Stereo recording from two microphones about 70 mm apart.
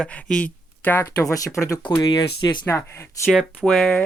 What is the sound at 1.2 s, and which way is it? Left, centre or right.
Speech, left.